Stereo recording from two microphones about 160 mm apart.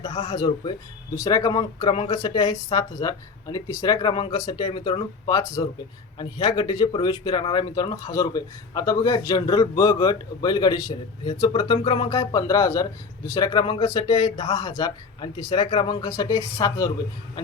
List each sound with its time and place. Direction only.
0.0 s speech: 40° left (ahead or behind)
0.3 s speech: 30° left (ahead or behind)
2.1 s speech: 25° left (ahead or behind)